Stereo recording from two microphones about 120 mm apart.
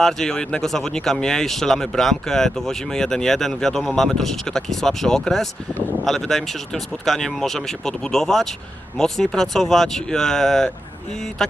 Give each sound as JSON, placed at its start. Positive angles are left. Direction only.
{"t": 0.0, "sound": "speech", "side_deg": 5}